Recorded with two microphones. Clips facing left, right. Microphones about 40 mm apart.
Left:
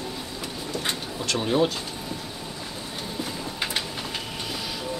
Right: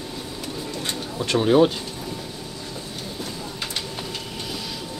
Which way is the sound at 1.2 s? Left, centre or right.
Centre.